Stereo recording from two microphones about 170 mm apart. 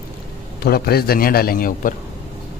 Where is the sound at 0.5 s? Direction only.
65° left (ahead or behind).